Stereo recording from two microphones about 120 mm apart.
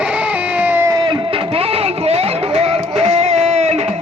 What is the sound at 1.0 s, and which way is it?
Music, 55° right (ahead or behind).